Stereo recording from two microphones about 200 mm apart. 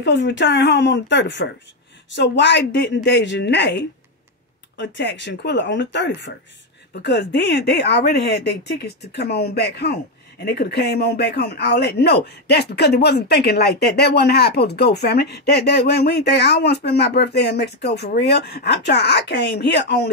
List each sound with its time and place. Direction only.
0.0 s speech: 65° left (ahead or behind)